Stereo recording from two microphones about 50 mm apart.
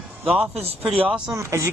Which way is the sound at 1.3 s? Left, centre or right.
Right.